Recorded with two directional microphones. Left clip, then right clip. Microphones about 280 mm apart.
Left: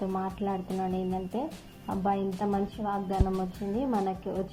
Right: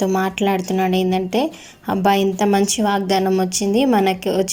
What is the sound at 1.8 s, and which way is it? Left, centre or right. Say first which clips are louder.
A woman's voice: right 13 dB; right.